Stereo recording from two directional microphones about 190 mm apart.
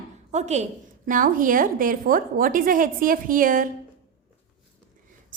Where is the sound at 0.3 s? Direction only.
35° right (ahead or behind).